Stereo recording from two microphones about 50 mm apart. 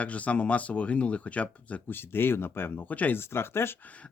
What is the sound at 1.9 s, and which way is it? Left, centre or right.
Speech, left.